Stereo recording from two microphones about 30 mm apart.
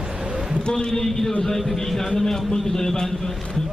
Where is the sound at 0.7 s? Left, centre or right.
Centre.